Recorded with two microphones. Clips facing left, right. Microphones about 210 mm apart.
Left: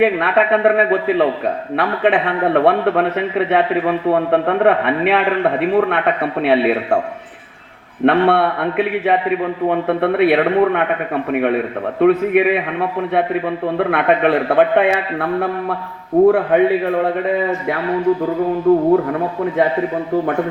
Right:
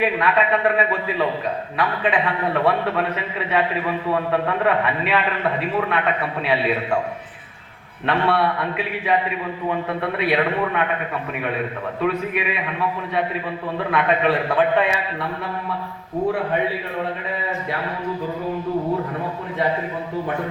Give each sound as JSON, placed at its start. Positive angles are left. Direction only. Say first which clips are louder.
{"t": 0.0, "sound": "a man's voice", "louder": "left 5 dB", "side_deg": 60}
{"t": 8.0, "sound": "a man's voice", "louder": "left 7 dB", "side_deg": 60}
{"t": 18.7, "sound": "a man's voice", "louder": "left 12 dB", "side_deg": 55}